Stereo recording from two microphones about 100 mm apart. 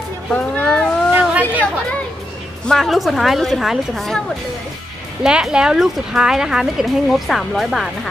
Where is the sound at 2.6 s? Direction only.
Centre (ahead or behind).